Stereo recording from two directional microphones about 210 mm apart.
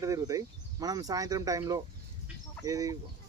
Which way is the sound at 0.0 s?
15° right (ahead or behind).